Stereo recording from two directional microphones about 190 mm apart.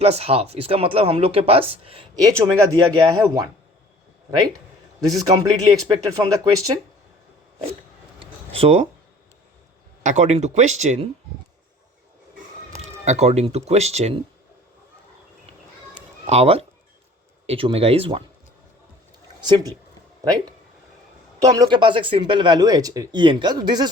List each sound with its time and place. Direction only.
0.0 s speech: 35° right (ahead or behind)
2.2 s speech: 20° right (ahead or behind)
5.0 s speech: 20° right (ahead or behind)
8.2 s a sound: 30° right (ahead or behind)
10.0 s speech: 40° right (ahead or behind)
12.7 s speech: 35° right (ahead or behind)
16.0 s a sound: 35° right (ahead or behind)
17.4 s speech: 30° right (ahead or behind)
19.4 s speech: 20° right (ahead or behind)
21.4 s speech: 20° right (ahead or behind)